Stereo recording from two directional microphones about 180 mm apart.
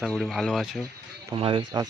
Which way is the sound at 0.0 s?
Centre (ahead or behind).